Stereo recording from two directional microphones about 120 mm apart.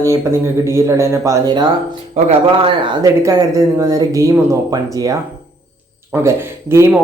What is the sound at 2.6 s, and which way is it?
Speech, 45° right (ahead or behind).